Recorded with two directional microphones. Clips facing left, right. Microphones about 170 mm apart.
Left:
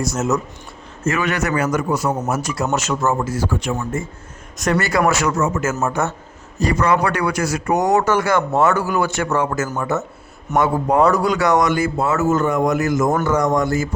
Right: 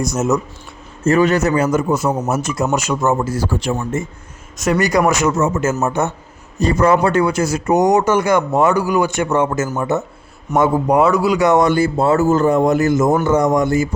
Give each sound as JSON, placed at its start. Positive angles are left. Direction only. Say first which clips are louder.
{"t": 0.0, "sound": "speech", "louder": "right 3 dB", "side_deg": -15}
{"t": 1.0, "sound": "a man's voice", "louder": "right 7 dB", "side_deg": -35}
{"t": 2.6, "sound": "speech", "louder": "right 2 dB", "side_deg": -10}
{"t": 3.2, "sound": "speech", "louder": "right 2 dB", "side_deg": -35}
{"t": 4.5, "sound": "speech", "louder": "right 2 dB", "side_deg": 0}
{"t": 4.8, "sound": "a man's voice", "louder": "right 4 dB", "side_deg": -20}
{"t": 11.0, "sound": "speech", "louder": "left 1 dB", "side_deg": -5}
{"t": 11.3, "sound": "a man's voice", "louder": "right 3 dB", "side_deg": -25}